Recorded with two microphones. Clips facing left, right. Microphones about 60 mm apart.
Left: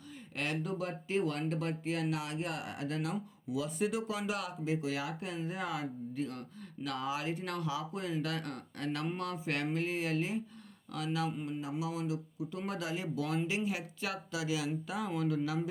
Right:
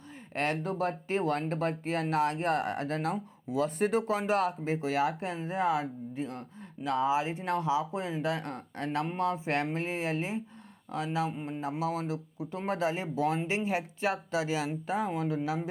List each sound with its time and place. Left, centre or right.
0.3 s speech: right